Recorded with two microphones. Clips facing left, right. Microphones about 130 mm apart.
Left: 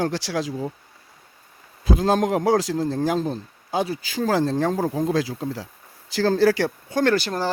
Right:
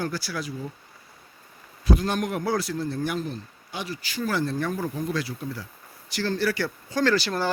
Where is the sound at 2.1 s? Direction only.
90° left.